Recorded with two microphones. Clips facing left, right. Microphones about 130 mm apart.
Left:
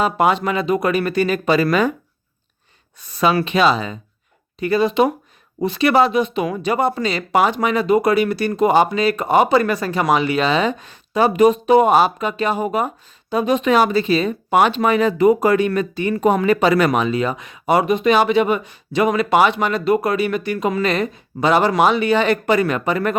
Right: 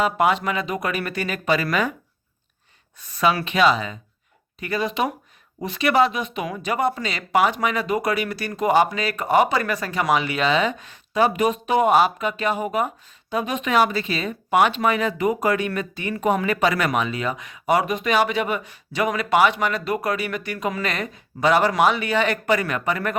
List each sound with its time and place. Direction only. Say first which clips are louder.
0.0 s speech: left 3 dB; 30° left (ahead or behind)
3.2 s speech: left 3 dB; 30° left (ahead or behind)